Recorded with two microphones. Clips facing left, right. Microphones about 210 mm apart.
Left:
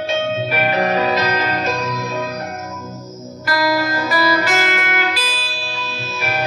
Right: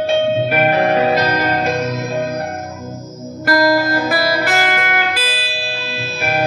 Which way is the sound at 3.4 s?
45° right (ahead or behind).